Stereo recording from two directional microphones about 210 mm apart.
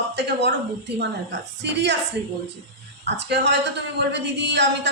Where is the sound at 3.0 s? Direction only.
55° right (ahead or behind).